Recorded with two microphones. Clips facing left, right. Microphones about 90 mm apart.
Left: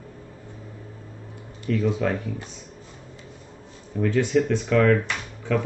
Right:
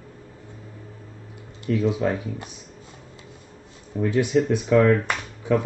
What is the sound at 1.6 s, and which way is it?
Speech, 10° right (ahead or behind).